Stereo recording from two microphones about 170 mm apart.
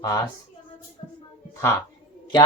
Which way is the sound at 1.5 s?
20° left (ahead or behind).